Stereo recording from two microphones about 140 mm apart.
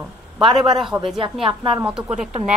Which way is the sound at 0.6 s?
Centre (ahead or behind).